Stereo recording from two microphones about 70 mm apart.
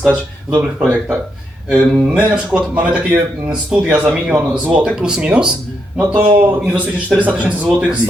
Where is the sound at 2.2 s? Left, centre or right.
Centre.